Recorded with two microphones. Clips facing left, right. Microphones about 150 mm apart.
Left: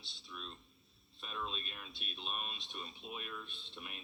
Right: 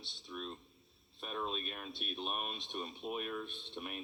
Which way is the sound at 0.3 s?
55° right (ahead or behind).